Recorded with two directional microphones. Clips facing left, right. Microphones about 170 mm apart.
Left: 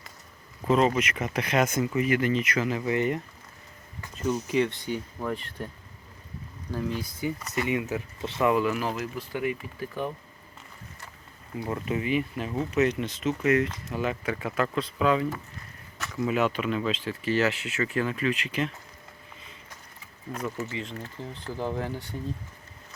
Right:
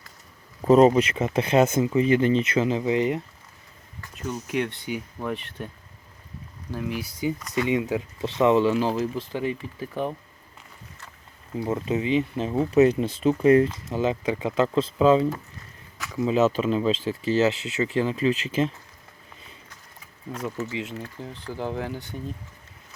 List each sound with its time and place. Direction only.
0.6 s speech: 40° right (ahead or behind); by 3.2 s 15° right (ahead or behind)
4.2 s speech: 5° right (ahead or behind)
6.7 s speech: 10° right (ahead or behind); by 10.1 s 30° right (ahead or behind)
11.6 s speech: 20° right (ahead or behind)
20.7 s speech: 15° right (ahead or behind)